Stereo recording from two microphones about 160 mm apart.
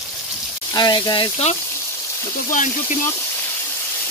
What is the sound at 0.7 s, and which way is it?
Speech, 25° left (ahead or behind).